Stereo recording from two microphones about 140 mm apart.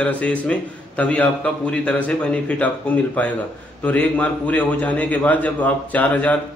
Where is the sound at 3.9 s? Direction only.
10° left (ahead or behind).